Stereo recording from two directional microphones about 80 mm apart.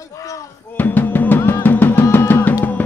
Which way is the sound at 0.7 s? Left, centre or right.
Left.